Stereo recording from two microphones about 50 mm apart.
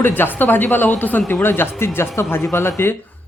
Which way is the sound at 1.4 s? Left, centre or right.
Left.